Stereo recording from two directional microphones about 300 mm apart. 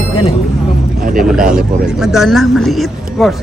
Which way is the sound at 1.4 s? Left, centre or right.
Centre.